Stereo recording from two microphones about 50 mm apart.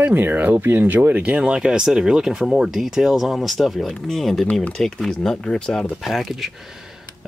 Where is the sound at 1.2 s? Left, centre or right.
Right; by 5.8 s centre.